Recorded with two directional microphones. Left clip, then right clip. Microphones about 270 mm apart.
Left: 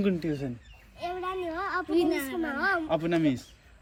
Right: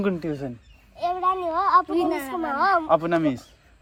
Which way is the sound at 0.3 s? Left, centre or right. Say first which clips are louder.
Right 3 dB; right.